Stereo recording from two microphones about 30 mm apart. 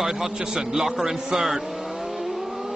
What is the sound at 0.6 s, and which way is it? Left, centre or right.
A man's voice, centre.